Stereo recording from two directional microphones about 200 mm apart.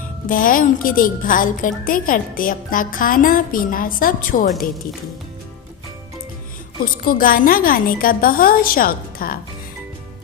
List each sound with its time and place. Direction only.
0.3 s a woman's voice: 45° left (ahead or behind)
6.8 s a woman's voice: 45° left (ahead or behind)